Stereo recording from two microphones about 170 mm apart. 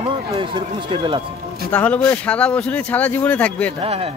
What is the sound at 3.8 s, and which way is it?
Speech, 35° right (ahead or behind).